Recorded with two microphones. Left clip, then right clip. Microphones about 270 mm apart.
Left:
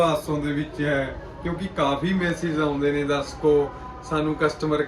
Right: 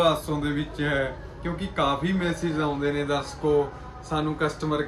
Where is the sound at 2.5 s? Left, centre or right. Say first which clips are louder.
Left 5 dB; centre.